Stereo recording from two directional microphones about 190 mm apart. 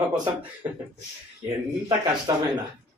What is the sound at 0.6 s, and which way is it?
Speech, 10° right (ahead or behind).